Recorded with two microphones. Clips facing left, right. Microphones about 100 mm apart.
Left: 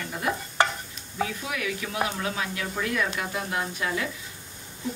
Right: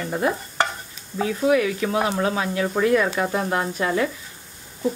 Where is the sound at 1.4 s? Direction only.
35° right (ahead or behind).